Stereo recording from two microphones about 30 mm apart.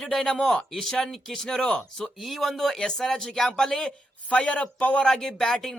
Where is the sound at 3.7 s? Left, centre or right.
Left.